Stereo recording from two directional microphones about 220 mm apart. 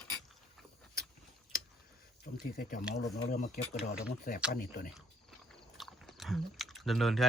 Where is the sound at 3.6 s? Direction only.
40° left (ahead or behind).